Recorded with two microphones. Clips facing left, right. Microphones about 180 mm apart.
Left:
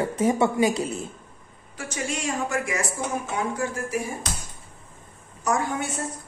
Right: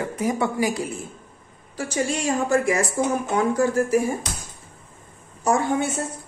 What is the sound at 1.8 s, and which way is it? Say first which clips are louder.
A woman's voice: right 5 dB; 35° right (ahead or behind).